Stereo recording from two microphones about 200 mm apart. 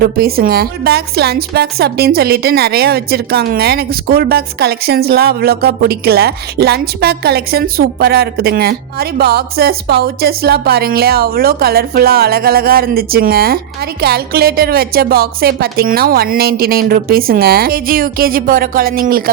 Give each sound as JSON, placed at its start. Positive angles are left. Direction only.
{"t": 0.0, "sound": "a woman's voice", "side_deg": -50}